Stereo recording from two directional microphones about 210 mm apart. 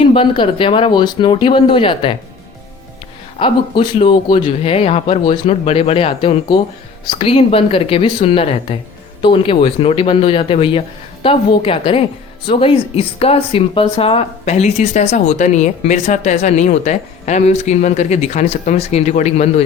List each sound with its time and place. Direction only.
0.0 s speech: 25° left (ahead or behind)
3.3 s speech: 25° left (ahead or behind)